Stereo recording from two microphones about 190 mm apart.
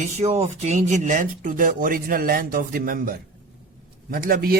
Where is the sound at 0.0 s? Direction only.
40° right (ahead or behind).